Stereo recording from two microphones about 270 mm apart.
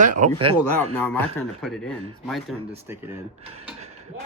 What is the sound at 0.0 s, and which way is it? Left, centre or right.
Speech, right.